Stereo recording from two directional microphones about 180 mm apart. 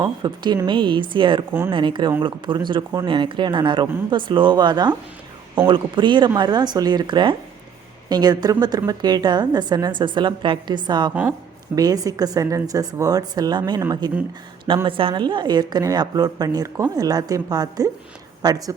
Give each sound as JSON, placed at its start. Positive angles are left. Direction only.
{"t": 0.0, "sound": "a woman's voice", "side_deg": -20}
{"t": 11.1, "sound": "a woman's voice", "side_deg": -10}
{"t": 11.7, "sound": "a woman's voice", "side_deg": -20}